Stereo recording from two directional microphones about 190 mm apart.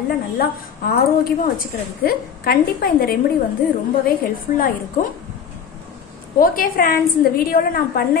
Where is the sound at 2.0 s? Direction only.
55° left (ahead or behind).